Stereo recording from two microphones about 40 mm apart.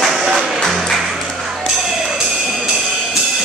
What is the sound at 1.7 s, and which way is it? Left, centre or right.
Music, centre.